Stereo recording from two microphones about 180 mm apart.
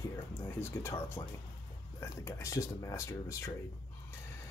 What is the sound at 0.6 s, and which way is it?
Speech, 15° left (ahead or behind).